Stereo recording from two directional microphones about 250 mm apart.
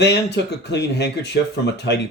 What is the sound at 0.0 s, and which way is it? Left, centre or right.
Speech, left.